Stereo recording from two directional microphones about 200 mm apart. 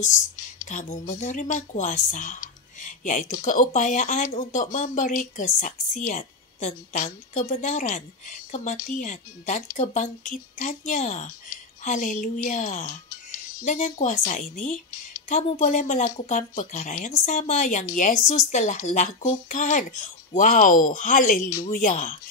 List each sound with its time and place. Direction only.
0.7 s speech: 40° left (ahead or behind)